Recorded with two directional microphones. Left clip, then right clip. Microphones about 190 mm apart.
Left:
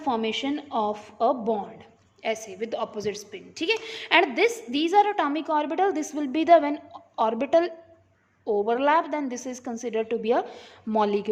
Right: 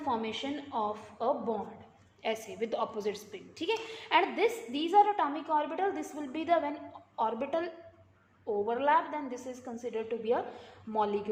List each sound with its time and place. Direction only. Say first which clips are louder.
0.0 s a woman's voice: left 7 dB; 65° left (ahead or behind)
2.2 s a woman's voice: left 5 dB; 30° left (ahead or behind); by 11.3 s 65° left (ahead or behind)